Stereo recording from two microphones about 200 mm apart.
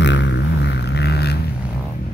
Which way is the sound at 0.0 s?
65° left (ahead or behind).